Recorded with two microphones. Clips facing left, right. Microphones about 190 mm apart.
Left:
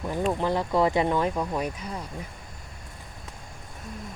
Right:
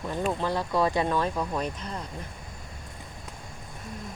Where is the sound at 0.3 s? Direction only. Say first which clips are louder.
Left 3 dB; 15° left (ahead or behind).